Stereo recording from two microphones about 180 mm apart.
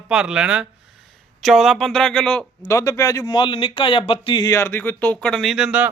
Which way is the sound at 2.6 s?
15° left (ahead or behind).